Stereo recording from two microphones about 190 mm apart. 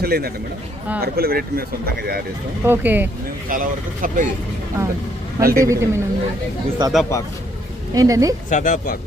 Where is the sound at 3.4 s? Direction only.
45° right (ahead or behind).